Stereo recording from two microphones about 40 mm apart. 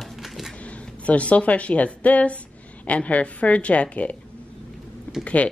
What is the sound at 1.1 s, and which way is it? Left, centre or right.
Speech, left.